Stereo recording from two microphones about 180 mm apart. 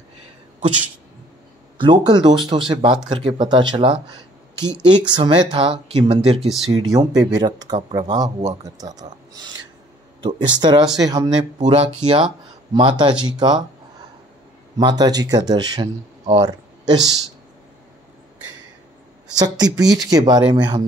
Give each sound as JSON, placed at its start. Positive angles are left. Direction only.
{"t": 1.8, "sound": "speech", "side_deg": -25}
{"t": 6.4, "sound": "speech", "side_deg": 0}
{"t": 6.9, "sound": "speech", "side_deg": -20}
{"t": 14.8, "sound": "speech", "side_deg": -20}
{"t": 19.3, "sound": "speech", "side_deg": -20}